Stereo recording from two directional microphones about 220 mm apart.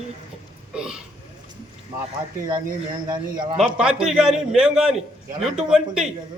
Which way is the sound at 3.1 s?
20° right (ahead or behind).